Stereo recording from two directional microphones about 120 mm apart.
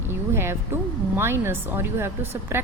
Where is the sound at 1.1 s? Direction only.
20° right (ahead or behind).